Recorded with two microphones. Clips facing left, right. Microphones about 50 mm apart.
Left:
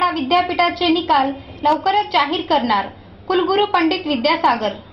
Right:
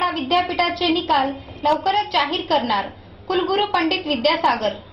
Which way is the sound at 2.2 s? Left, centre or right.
Left.